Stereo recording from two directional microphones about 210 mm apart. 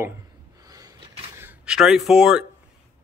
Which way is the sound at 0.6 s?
15° right (ahead or behind).